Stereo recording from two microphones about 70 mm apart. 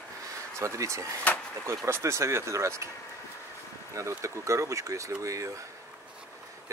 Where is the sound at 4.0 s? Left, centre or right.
Right.